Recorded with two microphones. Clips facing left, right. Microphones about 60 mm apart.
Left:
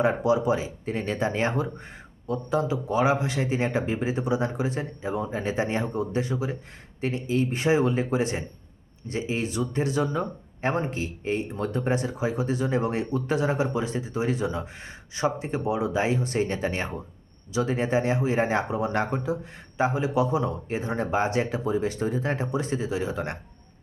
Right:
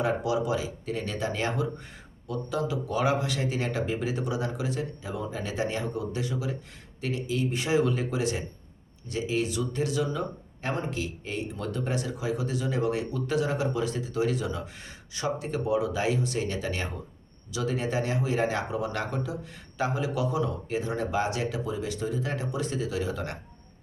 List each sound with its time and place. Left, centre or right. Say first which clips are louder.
0.0 s speech: left 4 dB; left